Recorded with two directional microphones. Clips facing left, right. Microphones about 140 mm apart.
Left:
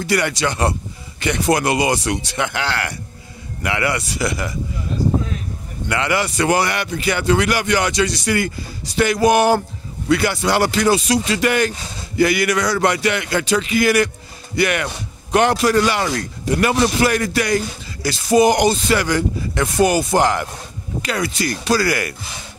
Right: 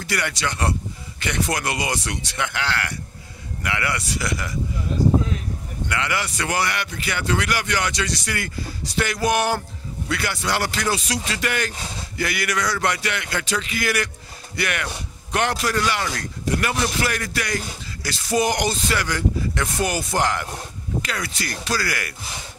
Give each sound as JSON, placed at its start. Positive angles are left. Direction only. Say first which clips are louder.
{"t": 0.0, "sound": "speech", "louder": "left 7 dB", "side_deg": 20}
{"t": 5.9, "sound": "speech", "louder": "left 6 dB", "side_deg": 30}
{"t": 10.0, "sound": "speech", "louder": "left 9 dB", "side_deg": 25}
{"t": 18.3, "sound": "speech", "louder": "left 8 dB", "side_deg": 10}
{"t": 18.7, "sound": "speech", "louder": "left 7 dB", "side_deg": 25}